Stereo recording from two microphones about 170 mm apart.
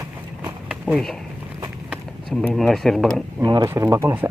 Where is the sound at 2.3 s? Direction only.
Centre (ahead or behind).